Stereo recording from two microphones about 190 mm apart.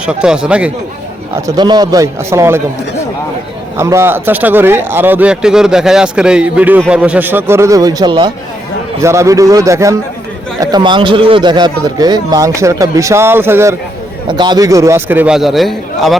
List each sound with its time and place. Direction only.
0.0 s speech: 5° right (ahead or behind)
1.5 s speech: 20° right (ahead or behind)
3.8 s speech: 15° right (ahead or behind)
14.3 s speech: 25° right (ahead or behind); by 16.1 s centre (ahead or behind)